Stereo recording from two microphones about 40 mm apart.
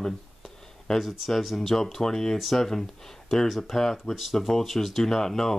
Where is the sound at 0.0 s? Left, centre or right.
Centre.